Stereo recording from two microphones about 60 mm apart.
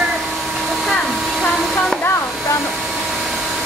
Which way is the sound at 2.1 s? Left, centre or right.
Left.